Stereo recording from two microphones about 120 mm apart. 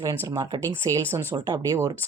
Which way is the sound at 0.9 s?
25° right (ahead or behind).